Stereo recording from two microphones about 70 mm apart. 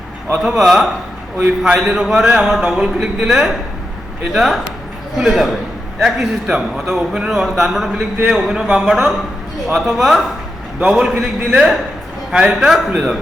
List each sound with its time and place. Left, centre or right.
0.3 s a man's voice: centre
1.4 s a man's voice: centre
1.8 s a man's voice: centre